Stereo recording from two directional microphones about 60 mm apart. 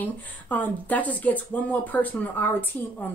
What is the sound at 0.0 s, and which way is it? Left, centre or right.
A woman's voice, left.